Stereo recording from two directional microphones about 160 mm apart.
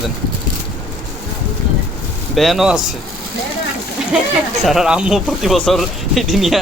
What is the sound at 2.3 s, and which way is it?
Speech, centre (ahead or behind).